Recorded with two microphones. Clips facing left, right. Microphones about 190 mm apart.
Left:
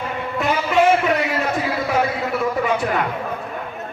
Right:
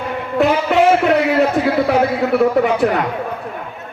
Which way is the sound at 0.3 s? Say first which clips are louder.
Right 5 dB; 70° right (ahead or behind).